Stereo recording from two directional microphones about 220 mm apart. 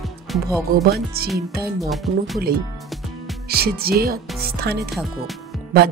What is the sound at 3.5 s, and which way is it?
Speech, 45° right (ahead or behind).